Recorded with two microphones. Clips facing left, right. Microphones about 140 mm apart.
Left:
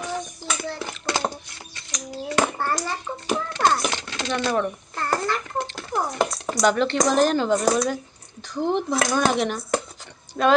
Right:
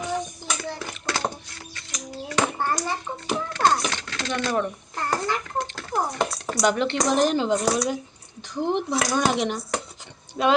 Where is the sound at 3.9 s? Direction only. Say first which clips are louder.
Left 2 dB; 20° left (ahead or behind).